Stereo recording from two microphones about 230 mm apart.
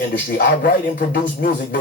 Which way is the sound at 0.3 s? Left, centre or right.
Left.